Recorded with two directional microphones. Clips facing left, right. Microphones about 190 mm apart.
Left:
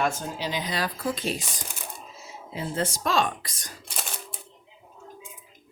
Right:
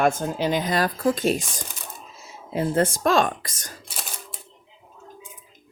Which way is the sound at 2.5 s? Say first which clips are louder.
Right 8 dB; 55° right (ahead or behind).